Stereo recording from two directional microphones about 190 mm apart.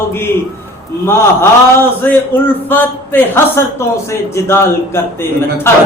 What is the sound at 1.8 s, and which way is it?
A man's voice, 10° left (ahead or behind).